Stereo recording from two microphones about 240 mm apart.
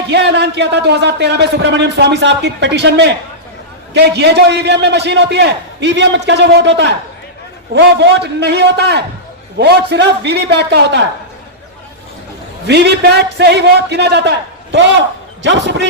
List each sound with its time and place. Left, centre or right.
0.1 s speech: right
12.6 s speech: right